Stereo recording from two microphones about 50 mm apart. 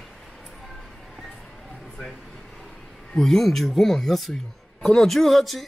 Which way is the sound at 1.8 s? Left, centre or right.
Centre.